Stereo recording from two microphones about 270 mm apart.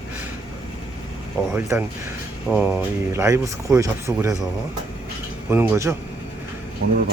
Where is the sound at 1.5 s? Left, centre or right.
Centre.